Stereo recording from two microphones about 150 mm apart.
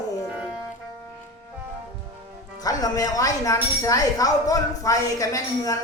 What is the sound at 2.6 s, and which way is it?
A woman's voice, 25° left (ahead or behind).